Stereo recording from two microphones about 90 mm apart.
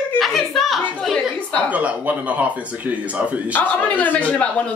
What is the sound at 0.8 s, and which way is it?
Speech, 15° left (ahead or behind).